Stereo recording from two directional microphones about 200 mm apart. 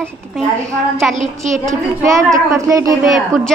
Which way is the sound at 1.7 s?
15° right (ahead or behind).